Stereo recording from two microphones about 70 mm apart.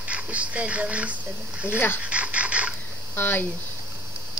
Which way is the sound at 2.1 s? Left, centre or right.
Centre.